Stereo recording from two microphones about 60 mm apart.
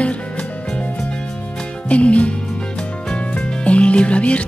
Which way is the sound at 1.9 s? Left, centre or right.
Left.